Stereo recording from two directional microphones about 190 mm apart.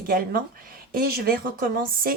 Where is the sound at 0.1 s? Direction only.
50° right (ahead or behind).